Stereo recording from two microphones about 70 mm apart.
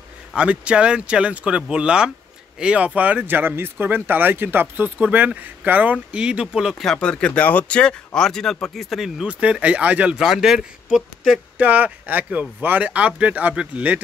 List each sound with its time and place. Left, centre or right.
0.4 s speech: centre
6.8 s speech: centre
8.9 s speech: centre
9.3 s speech: centre
10.1 s speech: centre
11.5 s speech: right